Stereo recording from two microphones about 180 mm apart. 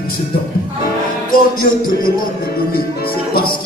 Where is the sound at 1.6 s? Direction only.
50° left (ahead or behind).